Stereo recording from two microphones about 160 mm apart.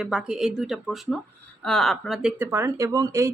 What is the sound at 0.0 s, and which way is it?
Speech, 5° right (ahead or behind).